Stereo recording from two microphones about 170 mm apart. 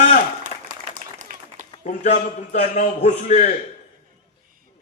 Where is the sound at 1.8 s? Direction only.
45° left (ahead or behind).